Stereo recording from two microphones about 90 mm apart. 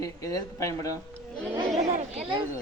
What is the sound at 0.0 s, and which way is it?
Speech, 40° left (ahead or behind).